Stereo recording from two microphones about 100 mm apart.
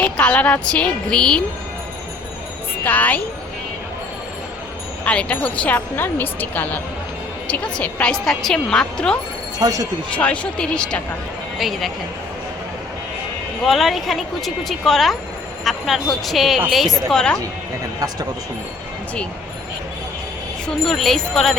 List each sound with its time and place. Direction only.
0.0 s speech: 10° left (ahead or behind)
2.8 s speech: 15° left (ahead or behind)
5.0 s speech: 15° left (ahead or behind)
9.6 s speech: 35° right (ahead or behind)
10.2 s speech: 15° left (ahead or behind)
11.5 s speech: centre (ahead or behind)
13.7 s speech: centre (ahead or behind)
20.8 s speech: 5° left (ahead or behind)